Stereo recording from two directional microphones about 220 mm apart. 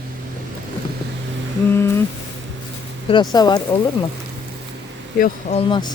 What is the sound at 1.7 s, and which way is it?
Speech, 10° left (ahead or behind).